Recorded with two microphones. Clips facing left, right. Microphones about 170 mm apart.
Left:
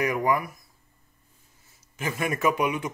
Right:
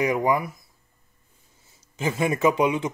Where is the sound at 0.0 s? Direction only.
20° right (ahead or behind).